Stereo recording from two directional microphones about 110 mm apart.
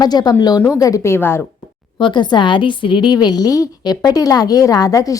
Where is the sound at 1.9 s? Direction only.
45° left (ahead or behind).